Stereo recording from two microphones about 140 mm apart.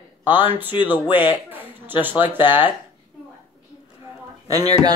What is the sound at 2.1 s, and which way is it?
Speech, 35° left (ahead or behind).